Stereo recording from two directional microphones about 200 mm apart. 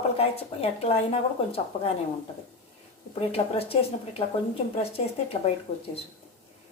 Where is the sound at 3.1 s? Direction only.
30° left (ahead or behind).